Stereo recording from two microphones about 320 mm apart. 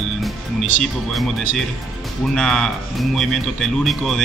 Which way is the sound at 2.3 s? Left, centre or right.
Centre.